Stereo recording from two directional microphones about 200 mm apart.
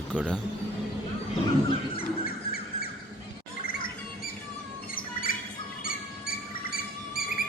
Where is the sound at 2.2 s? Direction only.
50° left (ahead or behind).